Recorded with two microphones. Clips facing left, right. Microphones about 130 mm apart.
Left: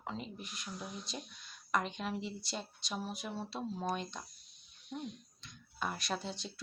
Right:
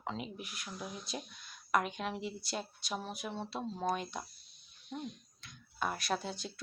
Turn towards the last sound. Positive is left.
turn(degrees=-5)  # may be behind; listen again after turning